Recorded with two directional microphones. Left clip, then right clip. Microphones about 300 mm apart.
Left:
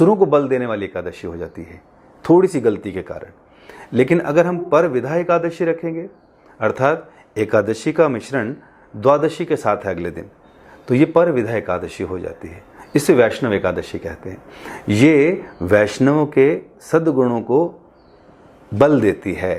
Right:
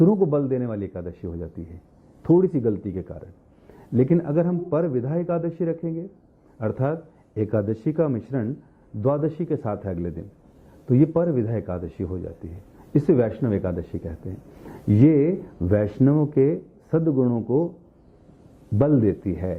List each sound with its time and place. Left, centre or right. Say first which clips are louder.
0.0 s speech: left 7 dB; centre
17.4 s speech: left 7 dB; left
18.8 s speech: left 7 dB; centre